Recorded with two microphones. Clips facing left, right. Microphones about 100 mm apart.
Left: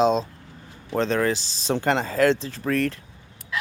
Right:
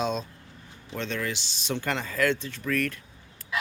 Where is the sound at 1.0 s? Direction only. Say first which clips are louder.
Left 9 dB; 40° left (ahead or behind).